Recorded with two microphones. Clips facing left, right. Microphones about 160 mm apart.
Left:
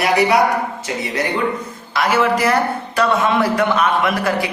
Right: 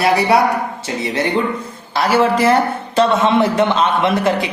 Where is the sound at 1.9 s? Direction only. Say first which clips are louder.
Right 2 dB; 30° right (ahead or behind).